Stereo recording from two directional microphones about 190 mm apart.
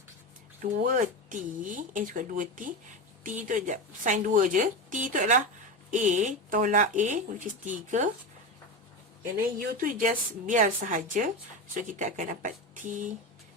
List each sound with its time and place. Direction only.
0.6 s speech: 45° right (ahead or behind)
9.6 s speech: 45° right (ahead or behind)